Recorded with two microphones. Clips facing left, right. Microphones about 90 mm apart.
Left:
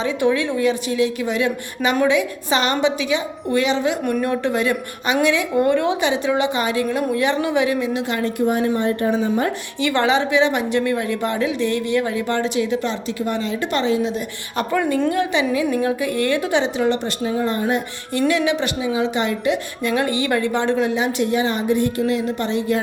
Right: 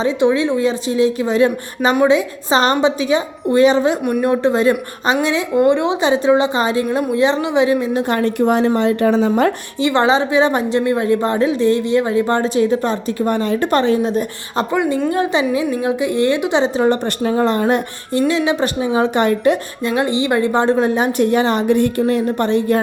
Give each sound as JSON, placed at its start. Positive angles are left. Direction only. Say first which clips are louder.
{"t": 0.0, "sound": "a woman's voice", "louder": "right 4 dB", "side_deg": -25}
{"t": 4.2, "sound": "a woman's voice", "louder": "right 5 dB", "side_deg": -25}
{"t": 8.1, "sound": "a woman's voice", "louder": "right 5 dB", "side_deg": -65}
{"t": 9.8, "sound": "a woman's voice", "louder": "right 4 dB", "side_deg": -30}
{"t": 14.5, "sound": "a woman's voice", "louder": "right 2 dB", "side_deg": -30}
{"t": 15.5, "sound": "a woman's voice", "louder": "right 2 dB", "side_deg": -20}
{"t": 16.6, "sound": "a woman's voice", "louder": "right 4 dB", "side_deg": -35}
{"t": 17.2, "sound": "speech", "louder": "right 6 dB", "side_deg": -60}
{"t": 18.1, "sound": "a woman's voice", "louder": "right 2 dB", "side_deg": -30}
{"t": 18.9, "sound": "a woman's voice", "louder": "right 8 dB", "side_deg": -50}
{"t": 19.8, "sound": "a woman's voice", "louder": "right 2 dB", "side_deg": -25}